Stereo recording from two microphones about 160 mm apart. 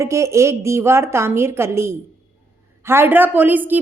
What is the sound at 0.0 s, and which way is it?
A woman's voice, 20° right (ahead or behind).